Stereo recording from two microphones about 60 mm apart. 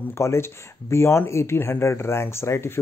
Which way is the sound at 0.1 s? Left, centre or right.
Left.